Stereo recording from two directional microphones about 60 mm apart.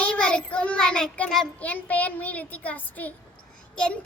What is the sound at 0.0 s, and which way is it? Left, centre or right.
Child singing, centre.